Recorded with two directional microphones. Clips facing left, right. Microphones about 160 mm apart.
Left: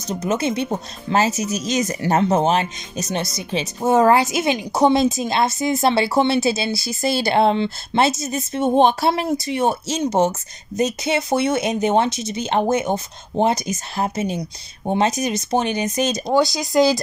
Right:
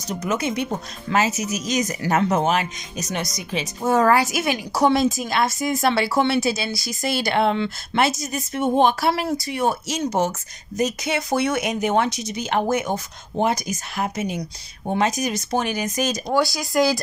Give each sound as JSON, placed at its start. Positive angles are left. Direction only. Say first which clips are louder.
{"t": 0.2, "sound": "speech", "louder": "left 3 dB", "side_deg": 25}